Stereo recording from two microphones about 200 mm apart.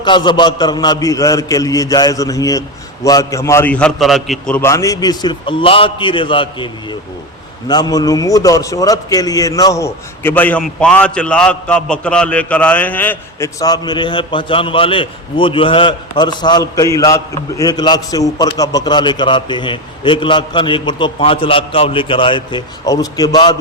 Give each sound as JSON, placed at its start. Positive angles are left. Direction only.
{"t": 0.0, "sound": "a man's voice", "side_deg": 20}
{"t": 7.7, "sound": "a man's voice", "side_deg": 20}